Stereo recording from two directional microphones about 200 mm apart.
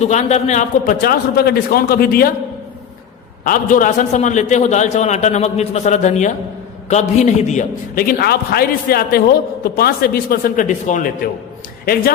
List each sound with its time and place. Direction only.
0.0 s a man's voice: 35° left (ahead or behind)
3.4 s a man's voice: 45° left (ahead or behind)